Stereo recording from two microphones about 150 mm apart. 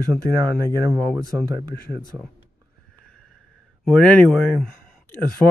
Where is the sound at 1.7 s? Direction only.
90° left.